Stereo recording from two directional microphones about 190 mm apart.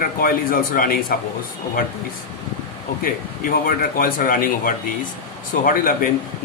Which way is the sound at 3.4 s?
50° left (ahead or behind).